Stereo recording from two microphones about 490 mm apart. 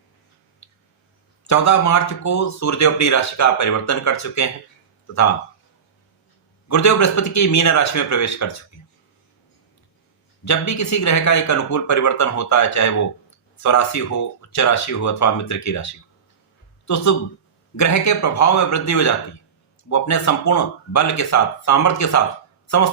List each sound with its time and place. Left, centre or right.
0.6 s a sound: left
1.5 s speech: left
6.7 s speech: left
10.4 s speech: left